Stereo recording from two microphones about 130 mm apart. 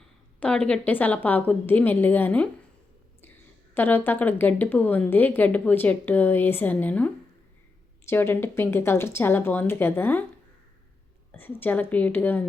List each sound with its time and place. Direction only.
0.3 s a woman's voice: 10° left (ahead or behind)
3.8 s a woman's voice: 15° left (ahead or behind)
11.3 s a woman's voice: 15° left (ahead or behind)